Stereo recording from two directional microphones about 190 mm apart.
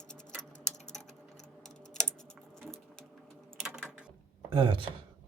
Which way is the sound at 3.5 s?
Centre (ahead or behind).